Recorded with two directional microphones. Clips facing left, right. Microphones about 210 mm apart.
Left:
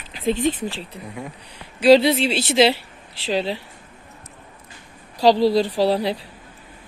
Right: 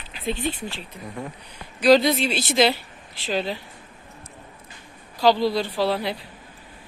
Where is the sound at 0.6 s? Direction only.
35° left (ahead or behind).